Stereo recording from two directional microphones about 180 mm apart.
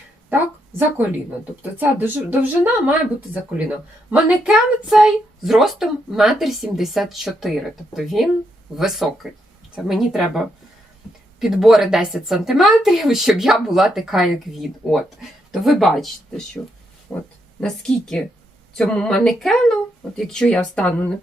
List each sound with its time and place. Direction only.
1.8 s a woman's voice: 10° right (ahead or behind)